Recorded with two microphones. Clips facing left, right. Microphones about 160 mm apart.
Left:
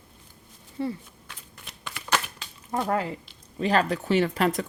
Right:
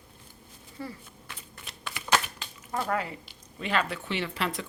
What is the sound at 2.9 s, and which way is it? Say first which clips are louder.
Speech: left 4 dB; 30° left (ahead or behind).